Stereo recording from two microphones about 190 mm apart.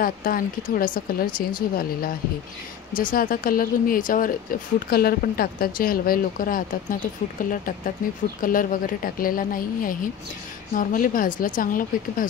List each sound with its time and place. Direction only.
0.0 s speech: 50° left (ahead or behind)